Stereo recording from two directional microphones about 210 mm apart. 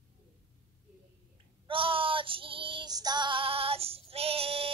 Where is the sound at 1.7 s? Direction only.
25° right (ahead or behind).